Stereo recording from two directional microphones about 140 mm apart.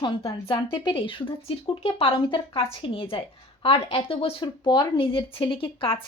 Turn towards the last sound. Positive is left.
turn(degrees=40)  # may be behind; listen again after turning